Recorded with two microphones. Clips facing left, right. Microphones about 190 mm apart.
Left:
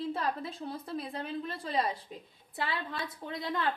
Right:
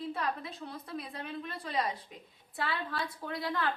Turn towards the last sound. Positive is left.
turn(degrees=20)  # may be behind; listen again after turning